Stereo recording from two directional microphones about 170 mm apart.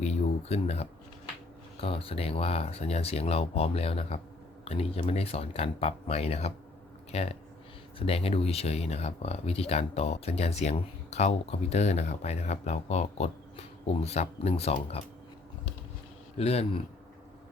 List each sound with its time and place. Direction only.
0.0 s speech: 40° left (ahead or behind)
16.4 s speech: 35° left (ahead or behind)